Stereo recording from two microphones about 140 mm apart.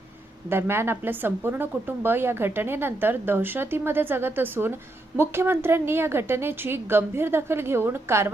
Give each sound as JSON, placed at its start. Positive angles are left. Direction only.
{"t": 0.4, "sound": "a woman's voice", "side_deg": -15}